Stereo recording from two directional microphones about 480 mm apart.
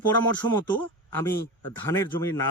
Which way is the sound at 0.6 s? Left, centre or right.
Centre.